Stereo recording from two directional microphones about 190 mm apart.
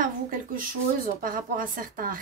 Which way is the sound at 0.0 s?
45° right (ahead or behind).